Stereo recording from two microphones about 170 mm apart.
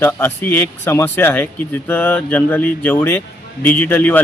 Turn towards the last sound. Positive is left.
turn(degrees=10)  # may be behind; listen again after turning